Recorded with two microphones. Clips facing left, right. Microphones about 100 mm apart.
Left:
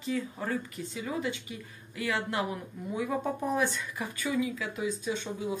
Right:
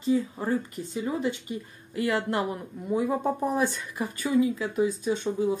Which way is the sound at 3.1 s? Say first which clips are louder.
Right 4 dB; 25° right (ahead or behind).